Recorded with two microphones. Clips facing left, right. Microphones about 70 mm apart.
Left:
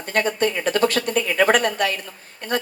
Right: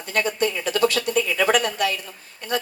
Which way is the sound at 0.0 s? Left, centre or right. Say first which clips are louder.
Left 2 dB; left.